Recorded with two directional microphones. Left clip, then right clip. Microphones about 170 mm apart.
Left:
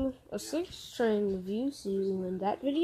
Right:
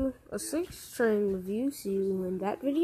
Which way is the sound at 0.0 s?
10° right (ahead or behind).